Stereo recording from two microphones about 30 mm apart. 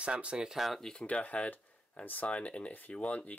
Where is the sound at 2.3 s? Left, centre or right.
Left.